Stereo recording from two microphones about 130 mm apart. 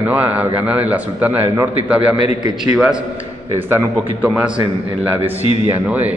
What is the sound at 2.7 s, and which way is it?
A man's voice, 5° right (ahead or behind).